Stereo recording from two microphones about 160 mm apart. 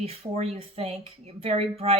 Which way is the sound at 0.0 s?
40° right (ahead or behind).